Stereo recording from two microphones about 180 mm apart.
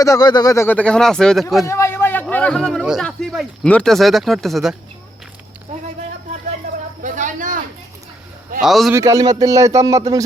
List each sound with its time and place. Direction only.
0.0 s speech: 20° left (ahead or behind); by 1.6 s centre (ahead or behind)
1.6 s a man's voice: 15° left (ahead or behind)
7.0 s a sound: 45° right (ahead or behind)
8.6 s a man's voice: centre (ahead or behind)
8.9 s speech: 15° right (ahead or behind)